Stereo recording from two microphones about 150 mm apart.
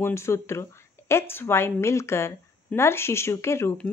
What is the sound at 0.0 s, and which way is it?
Speech, 20° left (ahead or behind).